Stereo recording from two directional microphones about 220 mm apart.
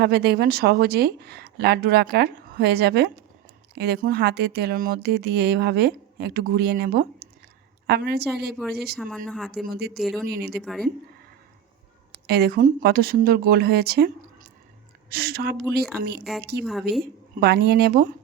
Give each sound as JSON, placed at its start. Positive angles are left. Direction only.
{"t": 0.0, "sound": "speech", "side_deg": -45}
{"t": 9.0, "sound": "speech", "side_deg": 5}
{"t": 9.7, "sound": "speech", "side_deg": -45}
{"t": 10.0, "sound": "speech", "side_deg": 0}
{"t": 10.2, "sound": "speech", "side_deg": -45}
{"t": 10.5, "sound": "speech", "side_deg": 0}
{"t": 12.1, "sound": "speech", "side_deg": -45}
{"t": 15.1, "sound": "speech", "side_deg": -45}